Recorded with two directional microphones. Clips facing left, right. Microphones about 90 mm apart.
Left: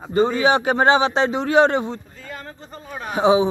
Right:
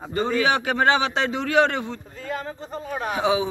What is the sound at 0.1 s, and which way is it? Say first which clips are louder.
A man's voice: left 5 dB; 25° left (ahead or behind).